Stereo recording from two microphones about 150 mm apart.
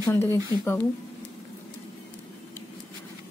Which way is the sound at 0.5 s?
30° right (ahead or behind).